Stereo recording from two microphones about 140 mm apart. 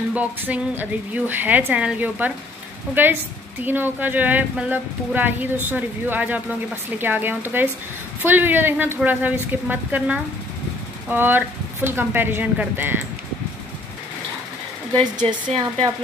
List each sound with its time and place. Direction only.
0.1 s speech: 10° right (ahead or behind)
15.2 s speech: 45° right (ahead or behind)